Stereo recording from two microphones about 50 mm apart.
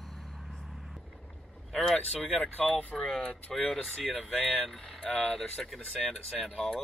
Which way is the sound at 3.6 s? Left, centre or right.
Centre.